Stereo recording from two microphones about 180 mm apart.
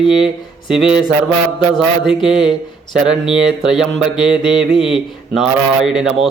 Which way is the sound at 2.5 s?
Centre (ahead or behind).